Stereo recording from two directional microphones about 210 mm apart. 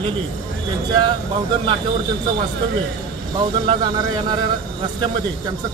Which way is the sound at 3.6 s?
20° right (ahead or behind).